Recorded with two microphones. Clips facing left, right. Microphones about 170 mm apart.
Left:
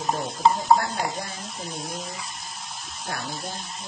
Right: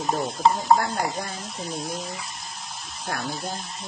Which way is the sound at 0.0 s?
Centre (ahead or behind).